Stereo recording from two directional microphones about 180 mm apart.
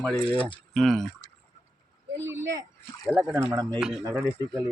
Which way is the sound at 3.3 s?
15° right (ahead or behind).